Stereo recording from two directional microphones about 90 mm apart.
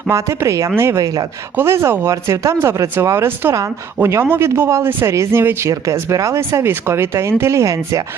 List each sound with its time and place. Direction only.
0.1 s a man's voice: 35° right (ahead or behind)